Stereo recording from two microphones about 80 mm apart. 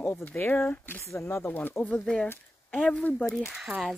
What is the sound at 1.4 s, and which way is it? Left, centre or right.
Speech, left.